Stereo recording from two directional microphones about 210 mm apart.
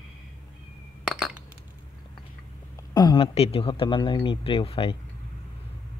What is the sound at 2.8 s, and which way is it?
A man's voice, 20° left (ahead or behind).